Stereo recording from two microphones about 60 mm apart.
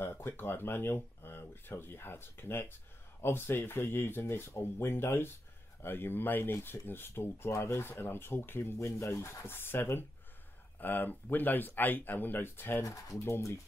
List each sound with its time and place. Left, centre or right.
0.0 s speech: left
7.8 s speech: left
8.7 s speech: left
9.5 s speech: left
12.8 s speech: left